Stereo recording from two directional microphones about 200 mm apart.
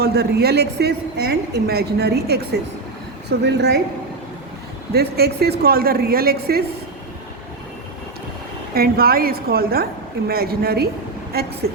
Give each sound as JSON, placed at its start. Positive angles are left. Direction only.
{"t": 0.0, "sound": "a woman's voice", "side_deg": -50}
{"t": 4.9, "sound": "a woman's voice", "side_deg": -50}
{"t": 8.7, "sound": "a woman's voice", "side_deg": -50}